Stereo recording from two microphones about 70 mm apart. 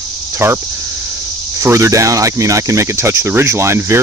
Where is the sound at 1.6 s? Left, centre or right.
Right.